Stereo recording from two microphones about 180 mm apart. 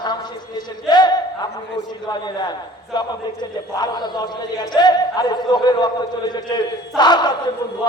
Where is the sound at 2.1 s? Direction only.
25° left (ahead or behind).